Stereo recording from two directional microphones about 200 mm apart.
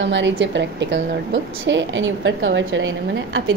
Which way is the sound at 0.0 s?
65° right (ahead or behind).